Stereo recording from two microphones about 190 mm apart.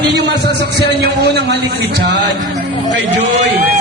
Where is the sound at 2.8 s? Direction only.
35° right (ahead or behind).